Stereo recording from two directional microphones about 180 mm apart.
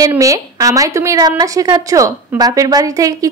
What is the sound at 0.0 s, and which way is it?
A woman's voice, 20° right (ahead or behind).